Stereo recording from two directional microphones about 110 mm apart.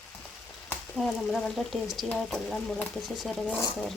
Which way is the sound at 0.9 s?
Centre (ahead or behind).